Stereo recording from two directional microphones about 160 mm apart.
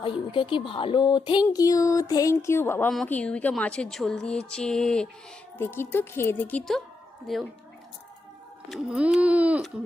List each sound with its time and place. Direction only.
0.0 s speech: 30° left (ahead or behind)
1.5 s a sound: 20° left (ahead or behind)
2.9 s speech: 5° left (ahead or behind)
8.7 s speech: 5° right (ahead or behind)